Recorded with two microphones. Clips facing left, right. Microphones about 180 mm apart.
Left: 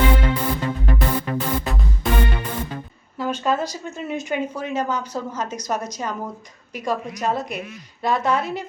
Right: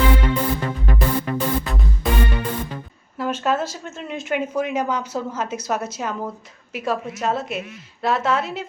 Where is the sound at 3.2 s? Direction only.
5° right (ahead or behind).